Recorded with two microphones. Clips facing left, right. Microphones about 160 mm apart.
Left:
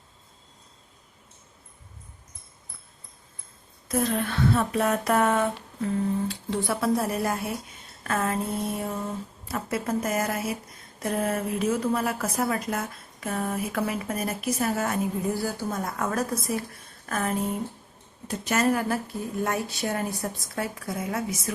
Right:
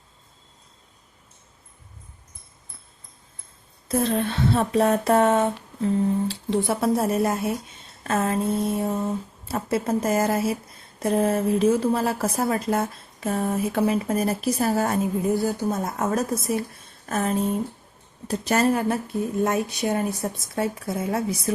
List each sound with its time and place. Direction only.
3.8 s a woman's voice: 30° right (ahead or behind)
15.2 s a woman's voice: 20° right (ahead or behind)